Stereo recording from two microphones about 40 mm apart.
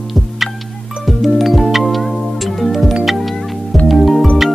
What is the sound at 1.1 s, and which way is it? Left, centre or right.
Music, centre.